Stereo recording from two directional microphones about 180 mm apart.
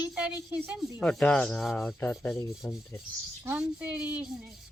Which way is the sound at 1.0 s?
5° left (ahead or behind).